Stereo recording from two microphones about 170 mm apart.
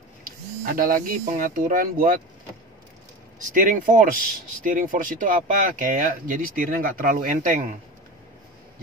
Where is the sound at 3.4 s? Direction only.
50° right (ahead or behind).